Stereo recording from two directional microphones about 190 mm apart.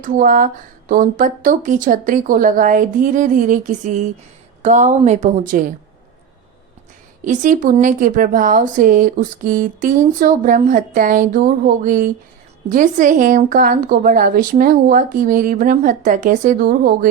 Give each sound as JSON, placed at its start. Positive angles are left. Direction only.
{"t": 0.0, "sound": "a woman's voice", "side_deg": -45}
{"t": 7.3, "sound": "a woman's voice", "side_deg": -45}